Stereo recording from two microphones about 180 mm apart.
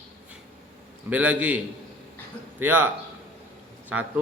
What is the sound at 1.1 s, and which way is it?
Speech, 10° right (ahead or behind).